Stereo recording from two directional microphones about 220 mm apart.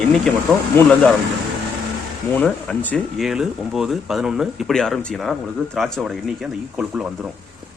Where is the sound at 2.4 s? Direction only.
5° left (ahead or behind).